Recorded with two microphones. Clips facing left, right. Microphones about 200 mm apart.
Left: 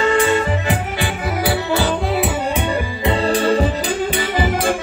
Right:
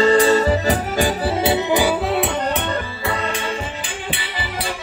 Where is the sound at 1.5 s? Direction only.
15° right (ahead or behind).